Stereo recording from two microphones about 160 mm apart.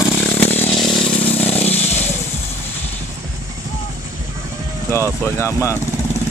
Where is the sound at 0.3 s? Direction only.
10° left (ahead or behind).